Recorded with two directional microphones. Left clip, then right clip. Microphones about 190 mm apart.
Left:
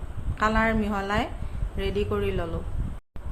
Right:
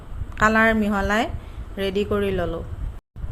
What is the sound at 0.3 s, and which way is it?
A woman's voice, 30° right (ahead or behind).